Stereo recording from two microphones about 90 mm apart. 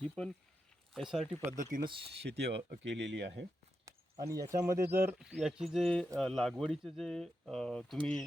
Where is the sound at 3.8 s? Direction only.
40° right (ahead or behind).